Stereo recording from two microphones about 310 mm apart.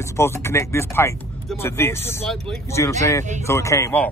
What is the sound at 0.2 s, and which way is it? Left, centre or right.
Speech, centre.